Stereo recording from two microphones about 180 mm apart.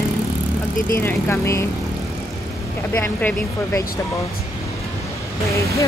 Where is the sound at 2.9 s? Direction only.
10° left (ahead or behind).